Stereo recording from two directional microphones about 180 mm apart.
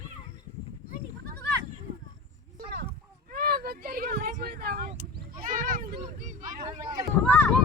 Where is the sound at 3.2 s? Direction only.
55° right (ahead or behind).